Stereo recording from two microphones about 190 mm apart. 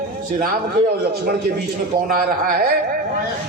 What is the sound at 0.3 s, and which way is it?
A man's voice, 50° right (ahead or behind).